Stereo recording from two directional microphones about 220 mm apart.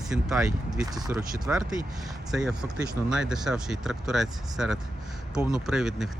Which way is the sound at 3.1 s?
5° right (ahead or behind).